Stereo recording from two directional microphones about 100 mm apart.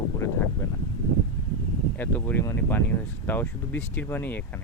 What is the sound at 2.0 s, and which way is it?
Speech, 20° left (ahead or behind).